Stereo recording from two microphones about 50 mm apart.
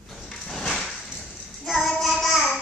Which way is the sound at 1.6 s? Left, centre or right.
Centre.